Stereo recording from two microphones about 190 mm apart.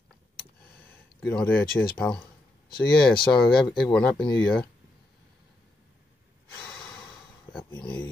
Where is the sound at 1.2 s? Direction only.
5° left (ahead or behind).